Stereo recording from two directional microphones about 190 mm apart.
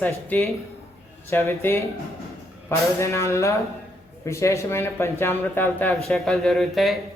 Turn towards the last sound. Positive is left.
turn(degrees=0)  # may be behind; listen again after turning